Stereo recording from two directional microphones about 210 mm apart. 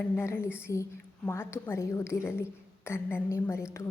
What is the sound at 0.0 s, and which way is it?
A woman's voice, 10° left (ahead or behind).